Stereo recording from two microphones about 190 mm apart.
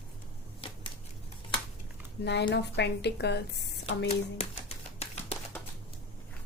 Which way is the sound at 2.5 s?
65° left (ahead or behind).